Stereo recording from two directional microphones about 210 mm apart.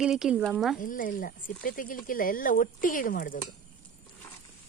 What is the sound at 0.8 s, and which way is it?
Speech, 40° left (ahead or behind).